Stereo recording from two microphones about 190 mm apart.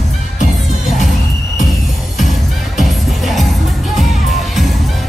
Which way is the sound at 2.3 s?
Centre (ahead or behind).